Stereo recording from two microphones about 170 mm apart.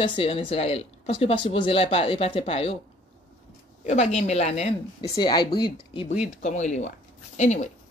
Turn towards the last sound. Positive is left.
turn(degrees=45)  # may be behind; listen again after turning